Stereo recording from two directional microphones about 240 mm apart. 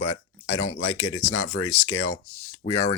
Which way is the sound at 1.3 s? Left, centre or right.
Left.